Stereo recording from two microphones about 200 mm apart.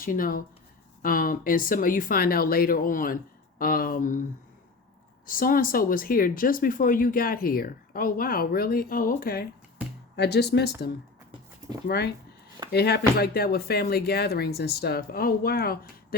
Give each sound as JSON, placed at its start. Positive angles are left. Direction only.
{"t": 0.0, "sound": "speech", "side_deg": 45}
{"t": 5.2, "sound": "speech", "side_deg": 45}